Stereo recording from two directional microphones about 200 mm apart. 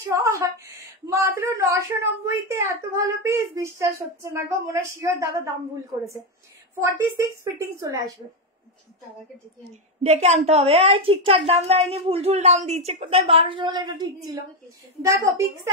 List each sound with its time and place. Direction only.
0.1 s a woman's voice: 15° right (ahead or behind)
6.7 s a woman's voice: 10° right (ahead or behind)
10.0 s a woman's voice: 35° right (ahead or behind); by 15.7 s 15° right (ahead or behind)